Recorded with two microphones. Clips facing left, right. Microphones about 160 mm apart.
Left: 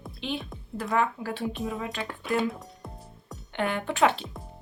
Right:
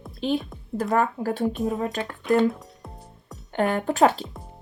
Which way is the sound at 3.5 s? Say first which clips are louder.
Right 5 dB; 40° right (ahead or behind).